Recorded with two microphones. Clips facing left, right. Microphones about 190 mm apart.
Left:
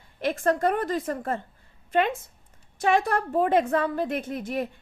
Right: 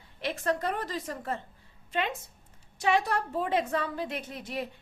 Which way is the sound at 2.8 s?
50° left (ahead or behind).